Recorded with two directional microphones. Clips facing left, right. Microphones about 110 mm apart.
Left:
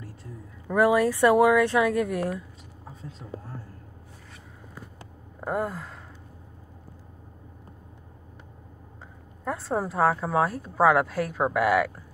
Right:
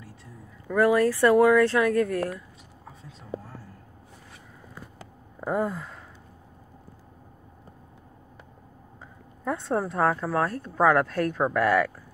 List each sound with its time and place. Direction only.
0.7 s speech: 15° left (ahead or behind)
5.4 s a sound: centre (ahead or behind)
9.4 s speech: centre (ahead or behind)